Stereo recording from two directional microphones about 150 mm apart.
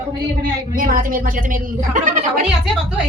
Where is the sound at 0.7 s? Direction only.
65° right (ahead or behind).